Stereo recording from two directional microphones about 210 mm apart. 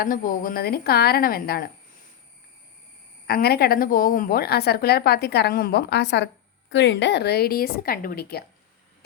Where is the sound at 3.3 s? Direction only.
45° left (ahead or behind).